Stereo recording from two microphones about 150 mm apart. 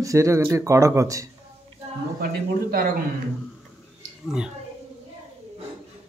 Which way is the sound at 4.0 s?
5° right (ahead or behind).